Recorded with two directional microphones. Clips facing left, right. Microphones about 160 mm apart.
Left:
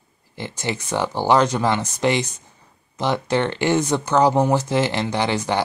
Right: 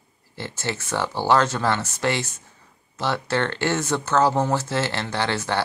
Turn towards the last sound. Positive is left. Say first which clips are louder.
# left 3 dB
turn(degrees=15)  # may be behind; listen again after turning